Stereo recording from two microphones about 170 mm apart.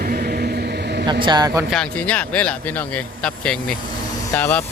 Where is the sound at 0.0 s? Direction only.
60° right (ahead or behind).